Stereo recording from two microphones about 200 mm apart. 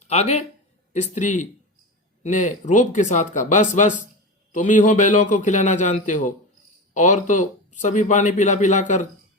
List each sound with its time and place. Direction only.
0.0 s a man's voice: 35° left (ahead or behind)